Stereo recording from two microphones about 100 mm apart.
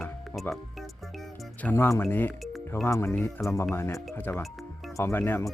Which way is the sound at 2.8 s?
25° left (ahead or behind).